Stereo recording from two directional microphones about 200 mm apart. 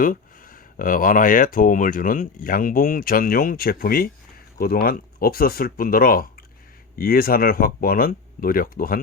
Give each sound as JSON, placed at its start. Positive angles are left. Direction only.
{"t": 0.0, "sound": "speech", "side_deg": 45}